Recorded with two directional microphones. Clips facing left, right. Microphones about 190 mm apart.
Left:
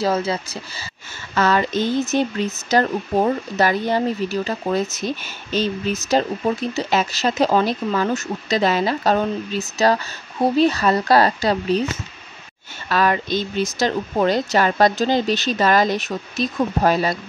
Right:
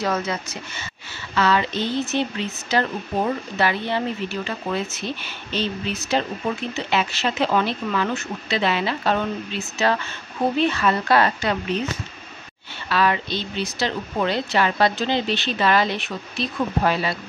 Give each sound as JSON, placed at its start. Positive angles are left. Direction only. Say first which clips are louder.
{"t": 0.0, "sound": "speech", "louder": "left 4 dB", "side_deg": 30}
{"t": 1.3, "sound": "speech", "louder": "left 2 dB", "side_deg": 45}
{"t": 12.8, "sound": "speech", "louder": "left 2 dB", "side_deg": 45}